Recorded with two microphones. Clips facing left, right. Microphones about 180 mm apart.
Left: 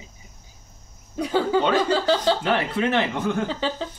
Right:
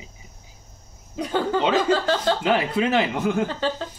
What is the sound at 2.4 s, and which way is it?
Speech, 10° right (ahead or behind).